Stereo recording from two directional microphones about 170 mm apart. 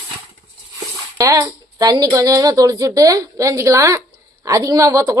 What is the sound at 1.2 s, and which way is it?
A woman's voice, 25° right (ahead or behind).